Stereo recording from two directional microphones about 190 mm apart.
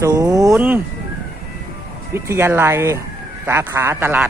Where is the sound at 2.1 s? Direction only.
10° right (ahead or behind).